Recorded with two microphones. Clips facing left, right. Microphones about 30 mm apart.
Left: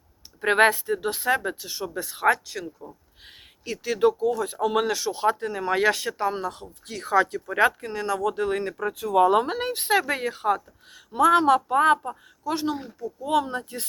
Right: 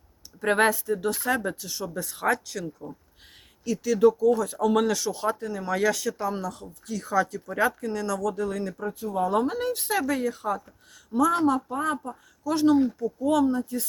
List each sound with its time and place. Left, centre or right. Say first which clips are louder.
0.4 s speech: left 3 dB; left
3.6 s speech: right 2 dB; left
5.2 s speech: left 4 dB; left
6.8 s speech: left 3 dB; left
8.8 s speech: left 10 dB; left
9.2 s a woman's voice: left 1 dB; left
12.5 s speech: right 11 dB; centre
13.2 s speech: right 1 dB; left
13.5 s speech: right 4 dB; left